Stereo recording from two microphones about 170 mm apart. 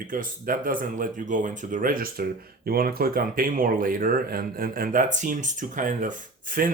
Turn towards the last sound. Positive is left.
turn(degrees=-50)  # may be behind; listen again after turning